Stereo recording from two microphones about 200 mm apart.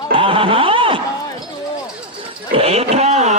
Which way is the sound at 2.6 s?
30° right (ahead or behind).